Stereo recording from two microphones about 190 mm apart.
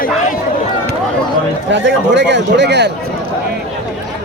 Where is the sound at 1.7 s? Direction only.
70° right (ahead or behind).